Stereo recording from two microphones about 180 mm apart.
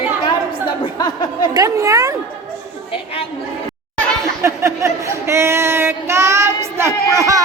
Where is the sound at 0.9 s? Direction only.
25° left (ahead or behind).